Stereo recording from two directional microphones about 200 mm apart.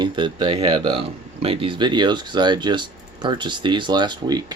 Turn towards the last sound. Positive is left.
turn(degrees=-20)  # may be behind; listen again after turning